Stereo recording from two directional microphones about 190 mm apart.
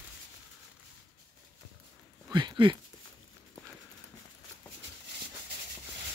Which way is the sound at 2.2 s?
25° right (ahead or behind).